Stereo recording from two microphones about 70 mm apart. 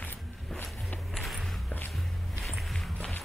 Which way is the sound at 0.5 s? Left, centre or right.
Left.